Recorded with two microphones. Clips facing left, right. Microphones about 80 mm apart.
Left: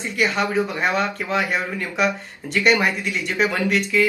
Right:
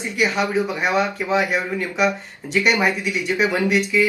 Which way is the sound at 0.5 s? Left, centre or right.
Centre.